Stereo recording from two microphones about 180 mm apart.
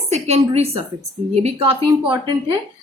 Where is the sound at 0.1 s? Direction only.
35° right (ahead or behind).